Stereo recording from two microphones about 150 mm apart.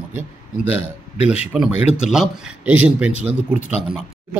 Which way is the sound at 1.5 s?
5° right (ahead or behind).